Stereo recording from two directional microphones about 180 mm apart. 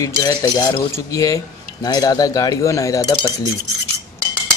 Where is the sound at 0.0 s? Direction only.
20° left (ahead or behind).